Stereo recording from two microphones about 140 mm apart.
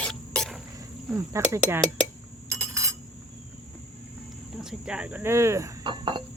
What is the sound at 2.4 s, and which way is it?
Cutlery, 20° right (ahead or behind).